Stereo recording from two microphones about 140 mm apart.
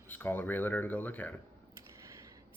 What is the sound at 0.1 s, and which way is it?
Speech, 15° left (ahead or behind).